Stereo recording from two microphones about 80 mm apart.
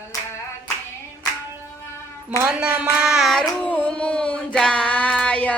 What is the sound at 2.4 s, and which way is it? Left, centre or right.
Child singing, centre.